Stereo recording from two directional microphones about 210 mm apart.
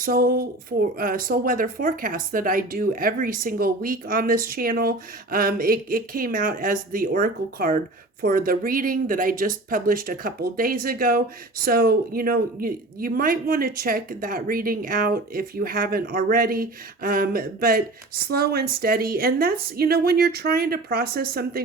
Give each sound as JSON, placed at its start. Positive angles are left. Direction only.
{"t": 0.0, "sound": "speech", "side_deg": -45}